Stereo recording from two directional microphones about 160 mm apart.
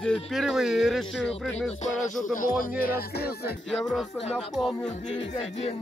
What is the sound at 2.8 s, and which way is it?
Music, 75° left (ahead or behind).